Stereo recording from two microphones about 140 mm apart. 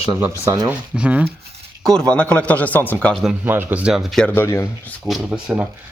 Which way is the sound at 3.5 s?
15° right (ahead or behind).